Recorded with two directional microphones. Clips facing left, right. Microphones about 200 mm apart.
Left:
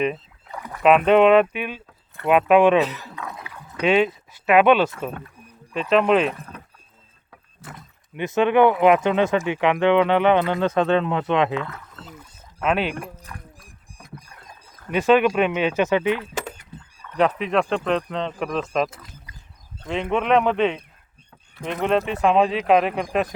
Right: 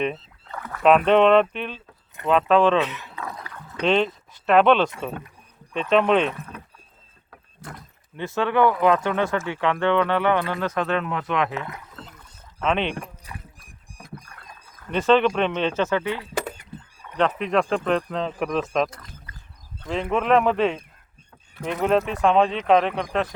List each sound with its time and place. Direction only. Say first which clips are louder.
0.0 s rowboat: left 2 dB; 5° left (ahead or behind)
0.8 s speech: left 1 dB; 5° left (ahead or behind)
3.2 s dog: even; centre (ahead or behind)
3.8 s speech: left 2 dB; 10° left (ahead or behind)
7.6 s speech: right 1 dB; 5° left (ahead or behind)
8.1 s speech: left 5 dB; 20° left (ahead or behind)
11.5 s speech: left 4 dB; 15° right (ahead or behind)
12.0 s rowboat: left 5 dB; 10° left (ahead or behind)
13.2 s dog: even; 5° right (ahead or behind)
14.8 s speech: left 1 dB; 10° left (ahead or behind)
17.3 s speech: even; centre (ahead or behind)